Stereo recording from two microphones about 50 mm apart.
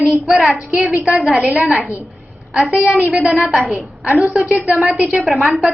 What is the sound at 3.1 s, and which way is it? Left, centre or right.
Speech, centre.